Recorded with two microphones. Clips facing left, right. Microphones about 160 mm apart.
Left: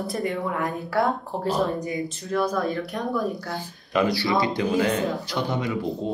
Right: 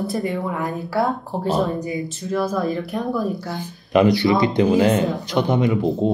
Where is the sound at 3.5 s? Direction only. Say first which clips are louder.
Right 3 dB; 20° right (ahead or behind).